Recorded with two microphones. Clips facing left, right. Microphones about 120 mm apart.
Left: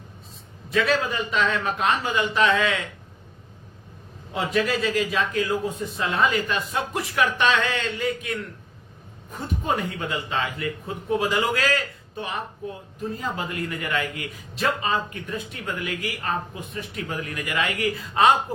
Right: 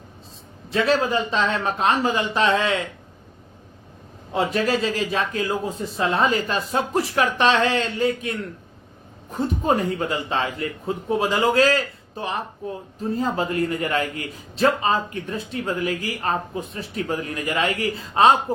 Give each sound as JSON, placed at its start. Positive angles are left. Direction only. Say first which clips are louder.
{"t": 0.7, "sound": "a man's voice", "louder": "right 3 dB", "side_deg": -30}
{"t": 4.3, "sound": "a man's voice", "louder": "right 3 dB", "side_deg": -30}
{"t": 9.3, "sound": "speech", "louder": "right 5 dB", "side_deg": -35}